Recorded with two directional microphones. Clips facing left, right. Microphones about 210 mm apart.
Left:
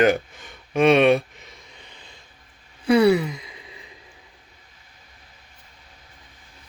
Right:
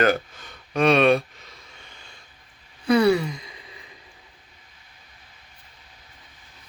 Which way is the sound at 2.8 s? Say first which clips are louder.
Left 2 dB; 25° left (ahead or behind).